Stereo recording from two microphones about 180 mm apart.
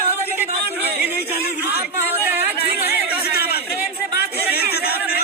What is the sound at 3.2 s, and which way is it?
Chatter, 60° left (ahead or behind).